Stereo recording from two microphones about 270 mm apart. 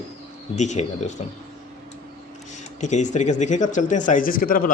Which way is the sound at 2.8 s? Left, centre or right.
Left.